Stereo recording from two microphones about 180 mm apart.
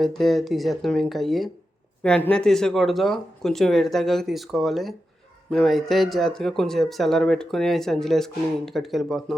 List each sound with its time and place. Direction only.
0.0 s speech: centre (ahead or behind)